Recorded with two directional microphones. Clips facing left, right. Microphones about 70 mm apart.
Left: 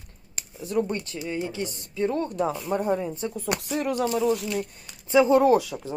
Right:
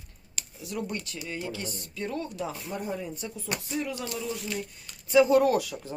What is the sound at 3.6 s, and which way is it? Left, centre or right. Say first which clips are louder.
Speech: left 4 dB; left.